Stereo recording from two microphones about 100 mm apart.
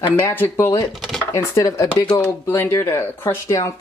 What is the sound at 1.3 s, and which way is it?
Speech, 30° left (ahead or behind).